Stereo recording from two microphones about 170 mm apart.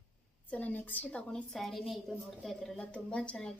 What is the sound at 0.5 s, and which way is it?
A woman's voice, 10° left (ahead or behind).